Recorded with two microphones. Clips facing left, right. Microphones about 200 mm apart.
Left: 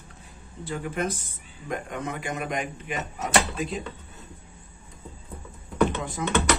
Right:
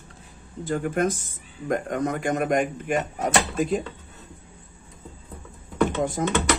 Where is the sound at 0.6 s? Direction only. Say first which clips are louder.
Right 5 dB; 45° right (ahead or behind).